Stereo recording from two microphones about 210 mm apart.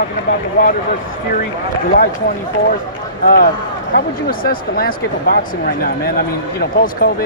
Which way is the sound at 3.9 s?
45° left (ahead or behind).